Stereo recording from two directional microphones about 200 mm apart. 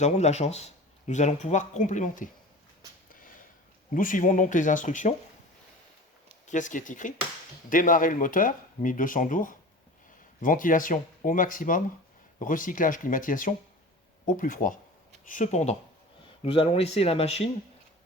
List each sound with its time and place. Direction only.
0.0 s speech: 35° left (ahead or behind)
3.1 s a sound: 45° left (ahead or behind)
3.9 s speech: 40° left (ahead or behind)
6.5 s speech: 40° left (ahead or behind)